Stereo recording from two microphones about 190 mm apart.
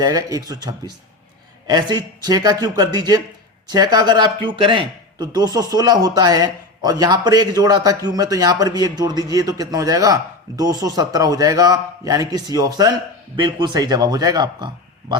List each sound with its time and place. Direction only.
0.0 s a man's voice: 20° right (ahead or behind)